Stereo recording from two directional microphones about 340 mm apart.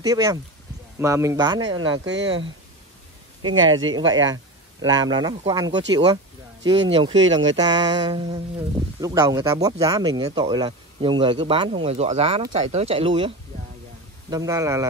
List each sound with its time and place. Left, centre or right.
0.0 s speech: centre
2.0 s speech: right
3.4 s speech: right
3.9 s speech: centre
14.3 s speech: centre